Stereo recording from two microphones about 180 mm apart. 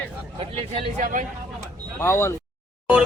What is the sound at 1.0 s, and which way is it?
Speech, 45° right (ahead or behind).